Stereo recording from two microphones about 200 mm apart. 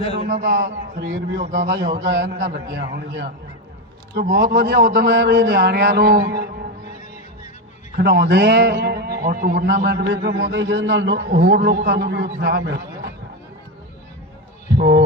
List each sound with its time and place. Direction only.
0.3 s a man's voice: 45° right (ahead or behind)
7.9 s a man's voice: 55° right (ahead or behind)
14.8 s a man's voice: 55° right (ahead or behind)